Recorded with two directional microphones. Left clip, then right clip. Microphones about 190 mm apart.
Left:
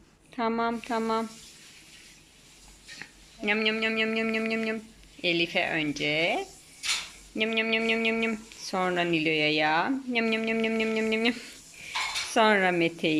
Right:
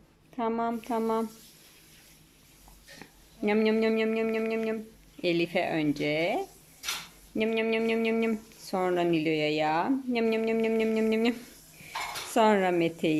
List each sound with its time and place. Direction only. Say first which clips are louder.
0.3 s speech: left 2 dB; 10° right (ahead or behind)
3.0 s speech: right 2 dB; 15° right (ahead or behind)